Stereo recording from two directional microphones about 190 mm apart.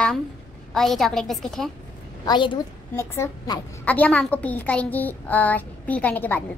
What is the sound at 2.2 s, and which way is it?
Speech, 25° left (ahead or behind).